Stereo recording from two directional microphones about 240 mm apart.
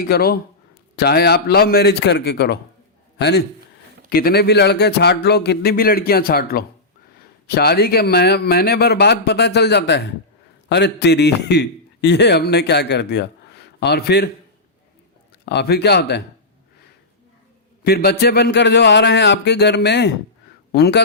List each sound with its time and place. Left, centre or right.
0.0 s a man's voice: left
15.4 s speech: left
17.8 s speech: left